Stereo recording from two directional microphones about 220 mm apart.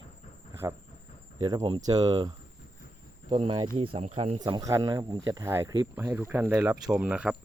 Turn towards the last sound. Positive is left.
turn(degrees=-5)  # may be behind; listen again after turning